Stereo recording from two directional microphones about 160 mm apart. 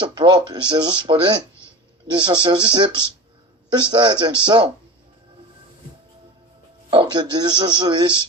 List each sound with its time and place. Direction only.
0.0 s speech: 25° right (ahead or behind)
6.9 s speech: 25° right (ahead or behind)